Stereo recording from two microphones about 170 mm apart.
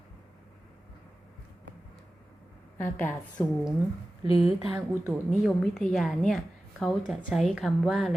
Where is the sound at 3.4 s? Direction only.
15° left (ahead or behind).